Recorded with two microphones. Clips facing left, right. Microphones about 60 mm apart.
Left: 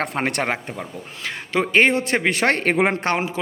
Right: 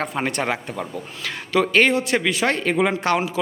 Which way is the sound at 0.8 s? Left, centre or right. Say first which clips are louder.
Right 2 dB; left.